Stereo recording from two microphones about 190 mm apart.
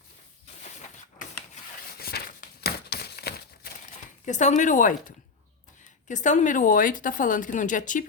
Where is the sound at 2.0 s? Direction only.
55° left (ahead or behind).